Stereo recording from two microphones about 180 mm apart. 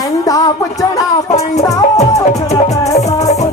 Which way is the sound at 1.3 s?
40° left (ahead or behind).